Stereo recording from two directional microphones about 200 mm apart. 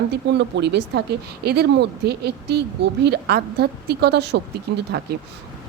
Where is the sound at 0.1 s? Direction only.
60° right (ahead or behind).